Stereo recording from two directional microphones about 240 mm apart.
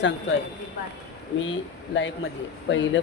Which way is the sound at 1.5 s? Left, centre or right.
Left.